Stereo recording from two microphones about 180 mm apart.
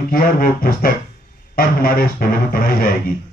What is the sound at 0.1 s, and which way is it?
Music, 55° left (ahead or behind).